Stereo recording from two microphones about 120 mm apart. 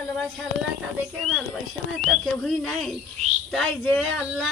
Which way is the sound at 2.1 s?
Centre (ahead or behind).